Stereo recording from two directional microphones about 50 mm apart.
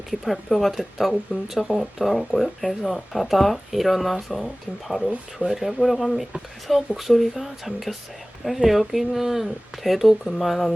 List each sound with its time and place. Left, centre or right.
0.4 s speech: centre